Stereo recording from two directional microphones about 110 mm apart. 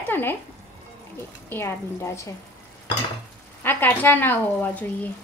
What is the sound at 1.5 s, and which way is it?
Speech, 25° left (ahead or behind).